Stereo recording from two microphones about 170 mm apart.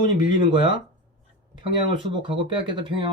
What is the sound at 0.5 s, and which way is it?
Speech, 25° right (ahead or behind).